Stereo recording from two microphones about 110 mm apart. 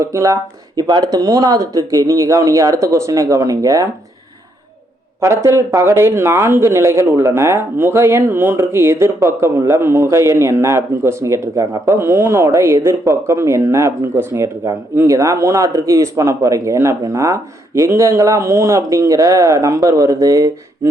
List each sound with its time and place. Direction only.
0.0 s speech: 30° right (ahead or behind)
0.8 s speech: 40° right (ahead or behind)
5.2 s speech: 25° right (ahead or behind)